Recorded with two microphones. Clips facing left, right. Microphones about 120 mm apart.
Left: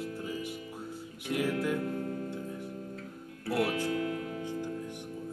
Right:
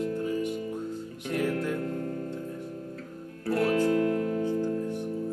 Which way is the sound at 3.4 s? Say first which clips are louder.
Right 6 dB; 45° right (ahead or behind).